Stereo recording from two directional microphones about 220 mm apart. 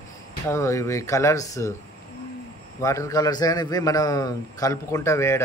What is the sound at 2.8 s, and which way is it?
A man's voice, 15° left (ahead or behind).